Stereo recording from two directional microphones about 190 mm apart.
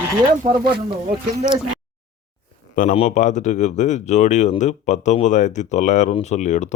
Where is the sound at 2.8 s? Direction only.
35° left (ahead or behind).